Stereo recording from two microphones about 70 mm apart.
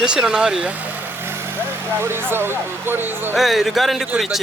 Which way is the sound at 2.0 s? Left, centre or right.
Right.